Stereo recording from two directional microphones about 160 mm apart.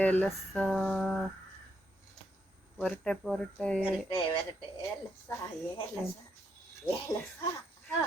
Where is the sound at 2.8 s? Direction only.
5° left (ahead or behind).